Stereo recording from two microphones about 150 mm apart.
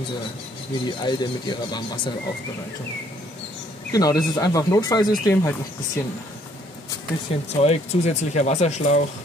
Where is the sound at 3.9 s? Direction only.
25° left (ahead or behind).